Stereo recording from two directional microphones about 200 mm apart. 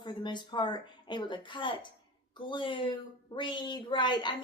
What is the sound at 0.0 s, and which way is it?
A woman's voice, 25° left (ahead or behind).